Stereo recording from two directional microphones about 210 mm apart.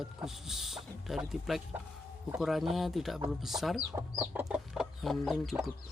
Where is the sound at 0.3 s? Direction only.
Centre (ahead or behind).